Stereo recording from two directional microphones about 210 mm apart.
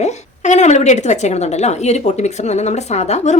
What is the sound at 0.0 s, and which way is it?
A woman's voice, 35° left (ahead or behind).